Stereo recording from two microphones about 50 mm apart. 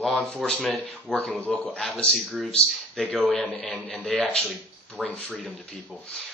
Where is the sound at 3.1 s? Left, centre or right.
Centre.